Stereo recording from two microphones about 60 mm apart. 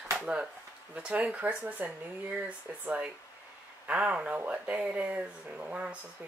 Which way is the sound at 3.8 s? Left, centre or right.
Right.